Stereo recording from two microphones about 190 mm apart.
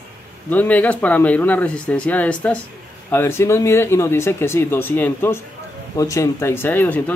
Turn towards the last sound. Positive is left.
turn(degrees=10)  # may be behind; listen again after turning